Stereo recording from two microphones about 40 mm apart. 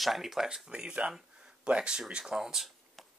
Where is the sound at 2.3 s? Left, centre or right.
Centre.